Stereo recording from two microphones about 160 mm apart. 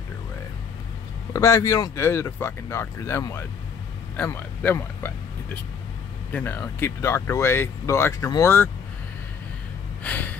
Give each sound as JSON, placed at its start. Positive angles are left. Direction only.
{"t": 1.3, "sound": "speech", "side_deg": 20}
{"t": 10.0, "sound": "gasp", "side_deg": 10}